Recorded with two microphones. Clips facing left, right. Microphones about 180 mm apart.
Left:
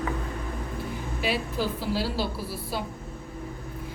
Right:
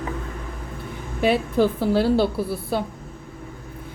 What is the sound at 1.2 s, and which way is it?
A woman's voice, 55° right (ahead or behind).